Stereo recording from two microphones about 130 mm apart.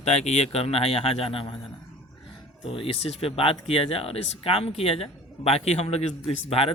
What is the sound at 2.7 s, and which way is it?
A man's voice, 45° left (ahead or behind).